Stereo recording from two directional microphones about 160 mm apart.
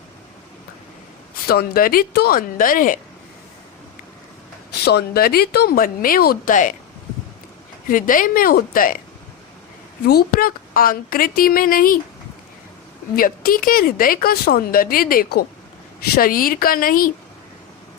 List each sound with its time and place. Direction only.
1.5 s speech: 70° left (ahead or behind)
4.9 s speech: 80° left; by 6.7 s 55° left (ahead or behind)
7.9 s speech: 60° left (ahead or behind)
10.1 s speech: 70° left (ahead or behind)
13.1 s speech: 65° left (ahead or behind)